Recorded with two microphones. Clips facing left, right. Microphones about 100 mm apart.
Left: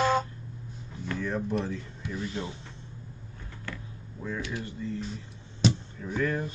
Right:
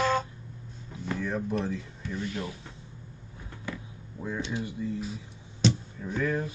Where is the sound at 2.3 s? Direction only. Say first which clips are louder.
Even; 25° left (ahead or behind).